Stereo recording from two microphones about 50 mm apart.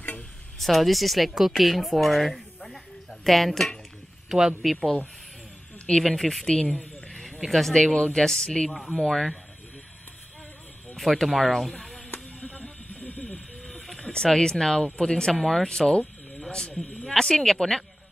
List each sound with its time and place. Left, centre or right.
0.6 s a woman's voice: centre
4.3 s speech: centre
5.9 s speech: centre
7.1 s speech: centre
8.6 s speech: centre
11.0 s speech: centre
12.4 s a sound: left
13.9 s speech: centre
15.4 s speech: centre
15.7 s a sound: centre
17.0 s speech: centre